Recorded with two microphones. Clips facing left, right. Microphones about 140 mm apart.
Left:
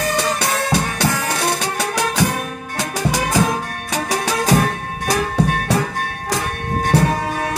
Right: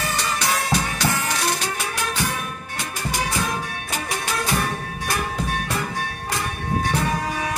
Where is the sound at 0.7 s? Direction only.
65° left (ahead or behind).